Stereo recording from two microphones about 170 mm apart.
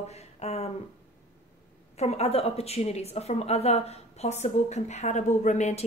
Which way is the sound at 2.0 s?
40° left (ahead or behind).